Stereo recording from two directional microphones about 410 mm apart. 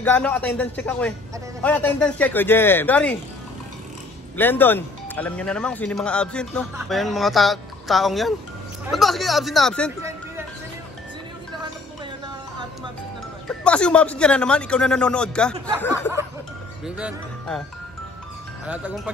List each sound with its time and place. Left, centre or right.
0.0 s speech: centre
4.4 s speech: centre
13.5 s speech: centre
18.7 s speech: centre